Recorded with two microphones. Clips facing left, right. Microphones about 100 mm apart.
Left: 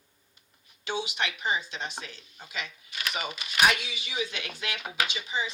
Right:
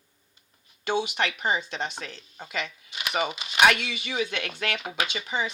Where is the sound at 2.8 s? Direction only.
20° right (ahead or behind).